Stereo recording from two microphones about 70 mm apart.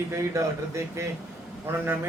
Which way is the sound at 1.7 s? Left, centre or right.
Right.